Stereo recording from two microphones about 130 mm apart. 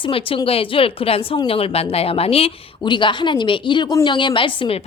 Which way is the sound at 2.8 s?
35° left (ahead or behind).